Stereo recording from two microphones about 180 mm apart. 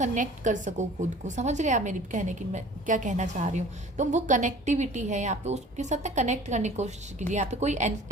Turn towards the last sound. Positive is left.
turn(degrees=-40)  # may be behind; listen again after turning